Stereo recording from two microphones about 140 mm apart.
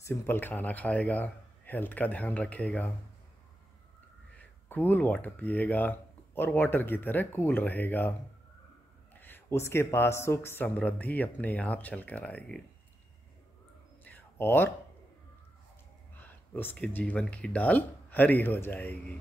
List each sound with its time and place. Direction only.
0.0 s speech: 15° left (ahead or behind)
4.4 s speech: 10° left (ahead or behind)
9.1 s speech: 15° left (ahead or behind)
14.0 s a sound: 15° left (ahead or behind)
16.2 s speech: 15° left (ahead or behind)